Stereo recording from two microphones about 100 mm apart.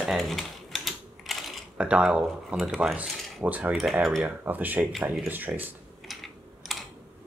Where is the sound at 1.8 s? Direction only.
10° right (ahead or behind).